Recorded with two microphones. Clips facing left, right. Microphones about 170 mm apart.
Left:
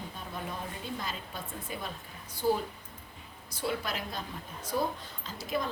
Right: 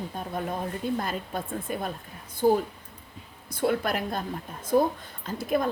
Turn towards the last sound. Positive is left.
turn(degrees=-55)  # may be behind; listen again after turning